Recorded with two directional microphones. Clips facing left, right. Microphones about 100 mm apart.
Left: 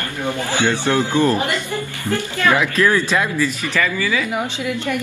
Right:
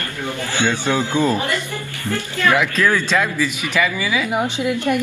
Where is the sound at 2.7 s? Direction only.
10° left (ahead or behind).